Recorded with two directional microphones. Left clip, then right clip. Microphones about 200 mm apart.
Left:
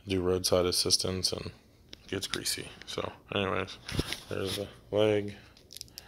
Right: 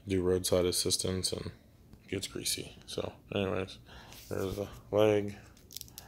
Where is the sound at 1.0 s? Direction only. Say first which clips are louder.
Left 3 dB; centre (ahead or behind).